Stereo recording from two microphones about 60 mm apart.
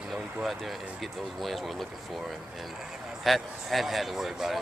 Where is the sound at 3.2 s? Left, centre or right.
Centre.